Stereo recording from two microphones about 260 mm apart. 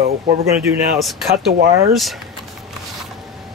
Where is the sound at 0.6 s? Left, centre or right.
Centre.